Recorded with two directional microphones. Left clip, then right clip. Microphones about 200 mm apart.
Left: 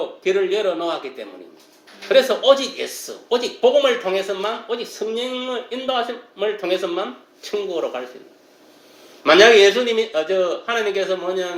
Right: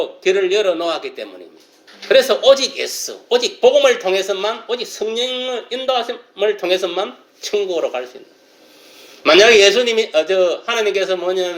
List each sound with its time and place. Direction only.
0.2 s a man's voice: 20° right (ahead or behind)
9.2 s speech: 15° right (ahead or behind)